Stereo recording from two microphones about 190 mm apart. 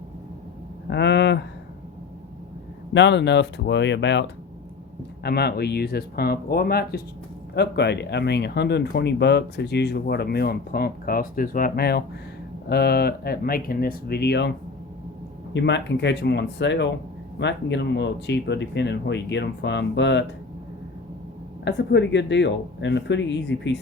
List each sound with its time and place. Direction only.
0.9 s speech: 65° left (ahead or behind)
2.9 s speech: 70° left (ahead or behind)
5.2 s speech: 60° left (ahead or behind)
15.5 s speech: 65° left (ahead or behind)
21.6 s speech: 65° left (ahead or behind)